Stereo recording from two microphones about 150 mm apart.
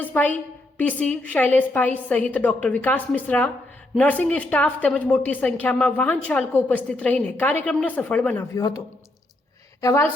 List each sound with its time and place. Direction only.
0.0 s a sound: 10° left (ahead or behind)
0.8 s a woman's voice: 10° left (ahead or behind)
8.5 s speech: 20° left (ahead or behind)
9.8 s speech: 20° left (ahead or behind)